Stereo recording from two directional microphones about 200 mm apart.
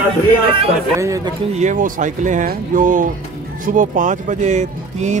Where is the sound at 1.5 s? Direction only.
35° right (ahead or behind).